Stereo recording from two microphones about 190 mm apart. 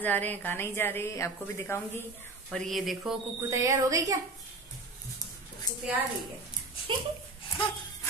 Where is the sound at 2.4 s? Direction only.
Centre (ahead or behind).